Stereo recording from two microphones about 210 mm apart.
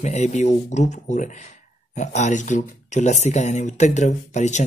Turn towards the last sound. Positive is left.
turn(degrees=35)  # may be behind; listen again after turning